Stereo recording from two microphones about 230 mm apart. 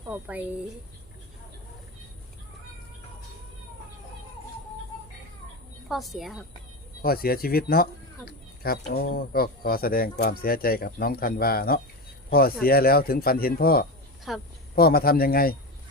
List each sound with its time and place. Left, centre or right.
0.1 s speech: centre
5.9 s a woman's voice: centre
7.0 s speech: left
14.3 s a woman's voice: centre
14.8 s speech: left